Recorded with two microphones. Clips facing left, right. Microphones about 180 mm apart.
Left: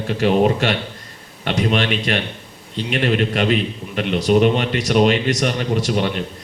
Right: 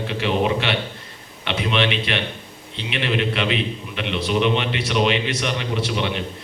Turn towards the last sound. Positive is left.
turn(degrees=45)  # may be behind; listen again after turning